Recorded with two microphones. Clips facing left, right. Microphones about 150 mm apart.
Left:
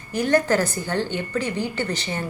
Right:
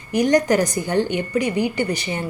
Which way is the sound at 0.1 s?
15° right (ahead or behind).